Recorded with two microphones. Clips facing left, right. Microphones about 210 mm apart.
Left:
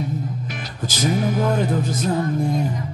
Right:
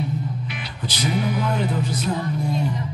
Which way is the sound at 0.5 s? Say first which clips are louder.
Left 2 dB; 45° left (ahead or behind).